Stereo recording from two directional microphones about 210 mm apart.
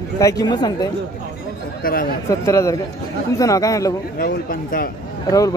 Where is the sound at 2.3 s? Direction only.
15° left (ahead or behind).